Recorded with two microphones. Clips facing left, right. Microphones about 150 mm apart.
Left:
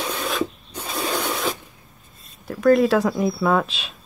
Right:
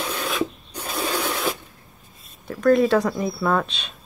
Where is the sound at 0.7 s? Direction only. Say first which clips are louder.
Even; 5° right (ahead or behind).